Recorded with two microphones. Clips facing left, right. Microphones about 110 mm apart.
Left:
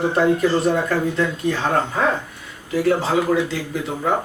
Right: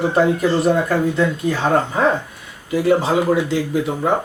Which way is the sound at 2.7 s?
10° right (ahead or behind).